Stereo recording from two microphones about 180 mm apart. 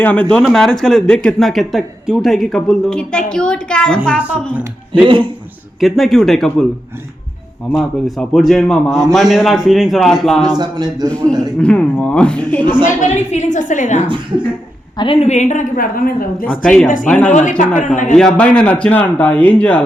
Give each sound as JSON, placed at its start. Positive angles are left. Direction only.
{"t": 0.0, "sound": "speech", "side_deg": 10}
{"t": 5.0, "sound": "a man's voice", "side_deg": -30}
{"t": 5.8, "sound": "speech", "side_deg": 0}
{"t": 7.7, "sound": "speech", "side_deg": 0}
{"t": 10.6, "sound": "a man's voice", "side_deg": -25}
{"t": 11.6, "sound": "speech", "side_deg": 5}
{"t": 13.0, "sound": "a woman's voice", "side_deg": 40}
{"t": 14.9, "sound": "a woman's voice", "side_deg": 30}
{"t": 16.5, "sound": "speech", "side_deg": 5}
{"t": 17.3, "sound": "a woman's voice", "side_deg": 45}
{"t": 18.2, "sound": "speech", "side_deg": 5}